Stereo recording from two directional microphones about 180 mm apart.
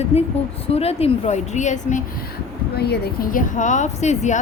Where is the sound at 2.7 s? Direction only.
65° left (ahead or behind); by 4.4 s 40° left (ahead or behind).